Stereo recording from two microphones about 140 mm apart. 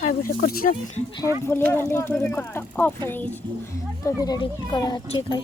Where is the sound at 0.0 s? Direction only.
90° left.